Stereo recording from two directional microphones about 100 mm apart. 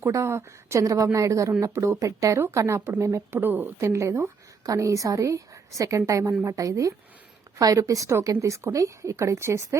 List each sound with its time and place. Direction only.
0.0 s a woman's voice: 25° right (ahead or behind)